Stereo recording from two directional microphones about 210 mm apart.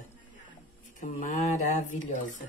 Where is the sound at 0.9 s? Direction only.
35° left (ahead or behind).